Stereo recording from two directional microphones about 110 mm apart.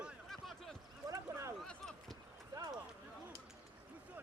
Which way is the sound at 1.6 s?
5° left (ahead or behind).